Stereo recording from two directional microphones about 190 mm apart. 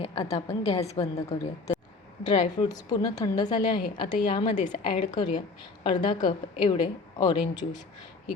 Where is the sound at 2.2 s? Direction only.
25° left (ahead or behind).